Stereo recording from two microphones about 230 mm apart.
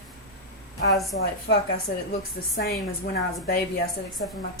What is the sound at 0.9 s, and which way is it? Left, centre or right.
Speech, centre.